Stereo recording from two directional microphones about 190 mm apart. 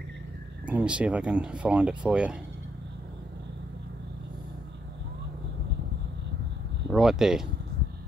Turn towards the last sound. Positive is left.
turn(degrees=0)  # may be behind; listen again after turning